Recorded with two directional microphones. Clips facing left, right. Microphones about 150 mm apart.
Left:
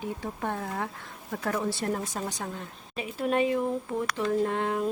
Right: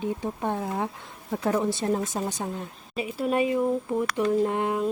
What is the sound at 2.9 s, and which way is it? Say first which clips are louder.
Speech: right 2 dB; 5° right (ahead or behind).